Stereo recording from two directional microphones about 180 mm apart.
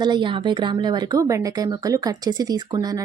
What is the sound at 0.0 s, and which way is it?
A woman's voice, 25° right (ahead or behind).